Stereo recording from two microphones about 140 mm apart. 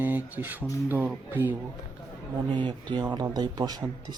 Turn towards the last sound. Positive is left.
turn(degrees=-30)  # may be behind; listen again after turning